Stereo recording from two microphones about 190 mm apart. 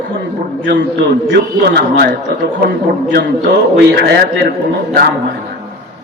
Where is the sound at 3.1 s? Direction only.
60° right (ahead or behind).